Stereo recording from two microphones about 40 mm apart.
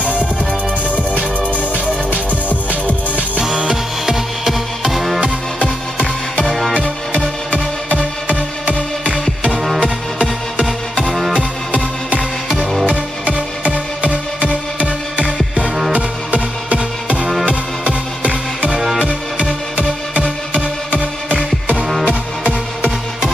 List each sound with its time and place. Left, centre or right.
0.0 s music: right
1.5 s music: right
4.0 s music: centre
7.9 s music: right
12.8 s music: right
18.7 s music: centre
20.5 s music: right